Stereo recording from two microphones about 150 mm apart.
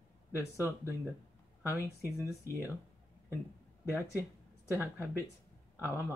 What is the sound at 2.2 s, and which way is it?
Speech, 20° left (ahead or behind).